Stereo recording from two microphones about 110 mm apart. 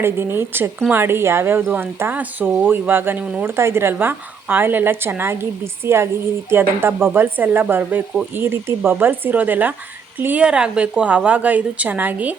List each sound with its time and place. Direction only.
0.0 s a woman's voice: 20° right (ahead or behind)